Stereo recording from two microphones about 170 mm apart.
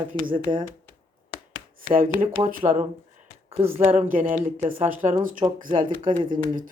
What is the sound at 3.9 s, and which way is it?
Speech, 50° right (ahead or behind).